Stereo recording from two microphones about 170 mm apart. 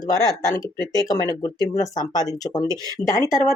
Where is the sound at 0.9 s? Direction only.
20° left (ahead or behind).